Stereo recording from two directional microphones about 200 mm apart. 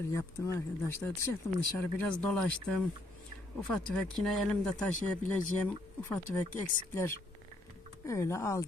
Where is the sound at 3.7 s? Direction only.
5° left (ahead or behind).